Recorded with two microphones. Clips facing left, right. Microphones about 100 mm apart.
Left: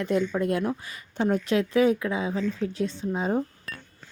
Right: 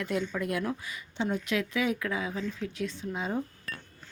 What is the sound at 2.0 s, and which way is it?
A woman's voice, 25° left (ahead or behind).